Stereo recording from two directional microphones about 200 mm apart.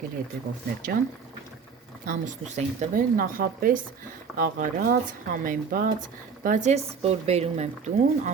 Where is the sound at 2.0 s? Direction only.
40° right (ahead or behind).